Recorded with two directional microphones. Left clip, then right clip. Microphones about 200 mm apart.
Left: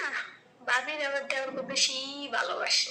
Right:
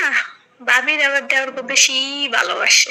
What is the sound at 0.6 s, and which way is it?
A man's voice, 20° right (ahead or behind).